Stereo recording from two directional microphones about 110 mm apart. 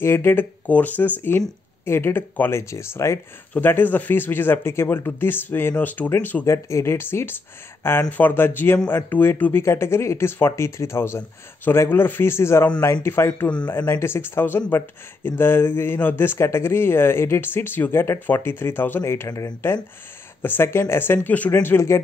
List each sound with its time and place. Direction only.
0.0 s speech: 20° left (ahead or behind)
6.4 s speech: 25° left (ahead or behind)
19.2 s speech: 30° left (ahead or behind)